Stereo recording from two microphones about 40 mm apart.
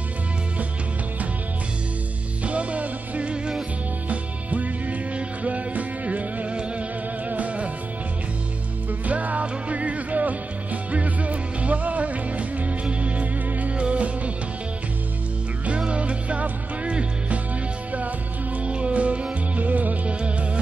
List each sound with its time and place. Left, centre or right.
2.4 s music: right
9.0 s music: right
15.9 s music: right
18.7 s music: right